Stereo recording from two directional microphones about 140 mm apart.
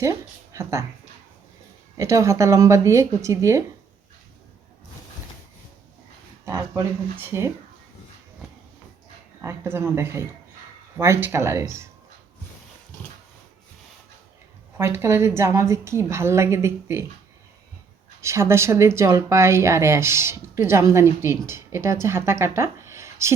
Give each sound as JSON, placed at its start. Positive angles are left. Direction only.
{"t": 0.0, "sound": "speech", "side_deg": -20}
{"t": 2.0, "sound": "speech", "side_deg": -20}
{"t": 6.4, "sound": "speech", "side_deg": -20}
{"t": 9.4, "sound": "speech", "side_deg": -15}
{"t": 14.8, "sound": "speech", "side_deg": -20}
{"t": 18.2, "sound": "speech", "side_deg": -20}